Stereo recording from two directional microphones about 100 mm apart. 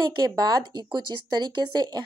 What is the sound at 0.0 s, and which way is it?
Speech, 45° right (ahead or behind).